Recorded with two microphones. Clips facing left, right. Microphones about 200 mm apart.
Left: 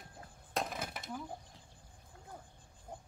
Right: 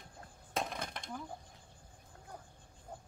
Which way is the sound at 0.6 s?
5° left (ahead or behind).